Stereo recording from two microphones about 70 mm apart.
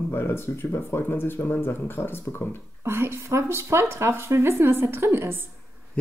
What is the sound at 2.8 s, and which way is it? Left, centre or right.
A woman's voice, right.